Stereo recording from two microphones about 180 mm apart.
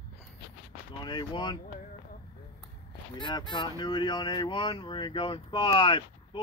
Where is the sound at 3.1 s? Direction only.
25° left (ahead or behind).